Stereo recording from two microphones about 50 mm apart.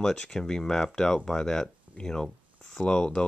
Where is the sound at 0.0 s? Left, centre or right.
Centre.